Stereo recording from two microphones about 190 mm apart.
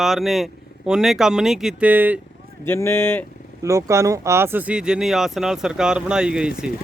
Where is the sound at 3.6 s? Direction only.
15° right (ahead or behind).